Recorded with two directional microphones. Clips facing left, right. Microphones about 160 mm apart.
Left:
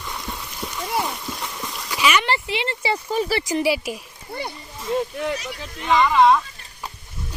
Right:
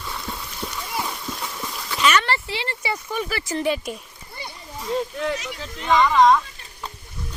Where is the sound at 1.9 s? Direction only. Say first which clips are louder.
Even; 10° left (ahead or behind); by 3.4 s 30° left (ahead or behind).